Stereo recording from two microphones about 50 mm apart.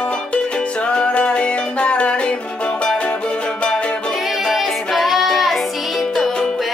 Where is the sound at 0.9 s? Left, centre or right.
Left.